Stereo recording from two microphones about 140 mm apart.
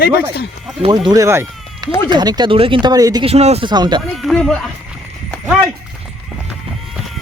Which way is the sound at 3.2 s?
50° right (ahead or behind).